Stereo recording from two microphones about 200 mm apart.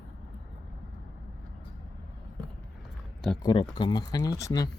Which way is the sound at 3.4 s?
20° left (ahead or behind).